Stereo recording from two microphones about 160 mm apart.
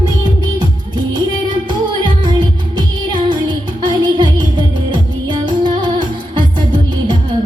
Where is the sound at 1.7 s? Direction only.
30° right (ahead or behind).